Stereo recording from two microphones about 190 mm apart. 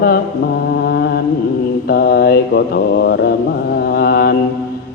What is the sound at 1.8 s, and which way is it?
A man's voice, 55° left (ahead or behind).